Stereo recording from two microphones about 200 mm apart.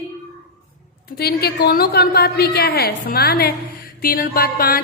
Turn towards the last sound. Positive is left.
turn(degrees=50)  # may be behind; listen again after turning